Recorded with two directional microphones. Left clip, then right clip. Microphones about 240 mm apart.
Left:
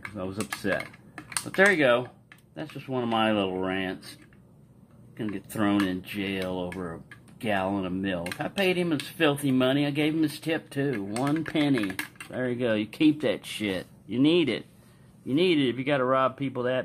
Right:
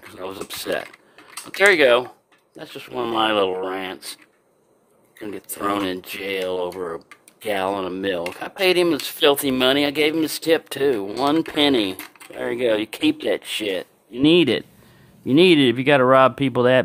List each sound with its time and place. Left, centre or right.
1.7 s speech: right
5.7 s speech: right
12.4 s speech: right